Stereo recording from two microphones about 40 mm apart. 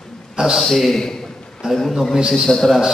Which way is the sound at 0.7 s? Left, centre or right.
Centre.